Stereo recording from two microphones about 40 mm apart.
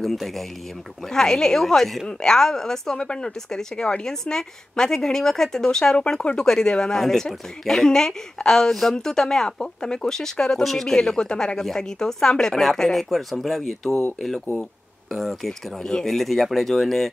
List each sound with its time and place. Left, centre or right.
0.0 s speech: centre
1.0 s speech: centre
15.1 s speech: centre